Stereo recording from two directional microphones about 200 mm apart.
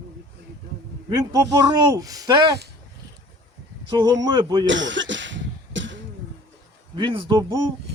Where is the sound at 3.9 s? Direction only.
20° right (ahead or behind).